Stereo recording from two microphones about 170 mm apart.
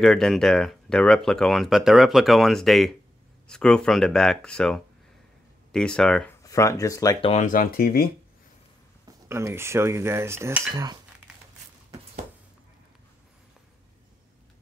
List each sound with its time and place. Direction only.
0.0 s speech: centre (ahead or behind)
6.4 s speech: 20° left (ahead or behind)
7.2 s speech: 35° left (ahead or behind)
7.4 s speech: 55° left (ahead or behind)
9.0 s cutlery: 15° right (ahead or behind)